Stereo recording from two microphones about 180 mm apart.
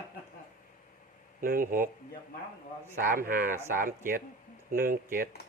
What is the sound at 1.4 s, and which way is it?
Speech, 50° right (ahead or behind).